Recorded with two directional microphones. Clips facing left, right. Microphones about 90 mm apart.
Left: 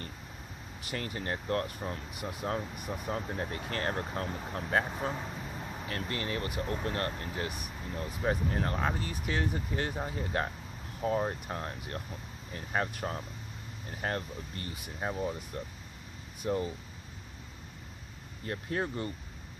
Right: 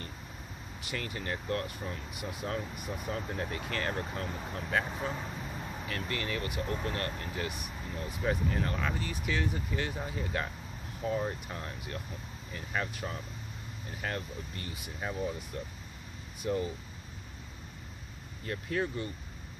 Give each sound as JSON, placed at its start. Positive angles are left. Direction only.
{"t": 0.7, "sound": "speech", "side_deg": 40}
{"t": 18.4, "sound": "speech", "side_deg": 35}